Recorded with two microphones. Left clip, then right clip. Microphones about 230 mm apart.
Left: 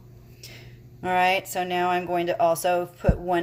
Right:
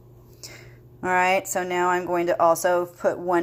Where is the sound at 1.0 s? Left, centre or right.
Centre.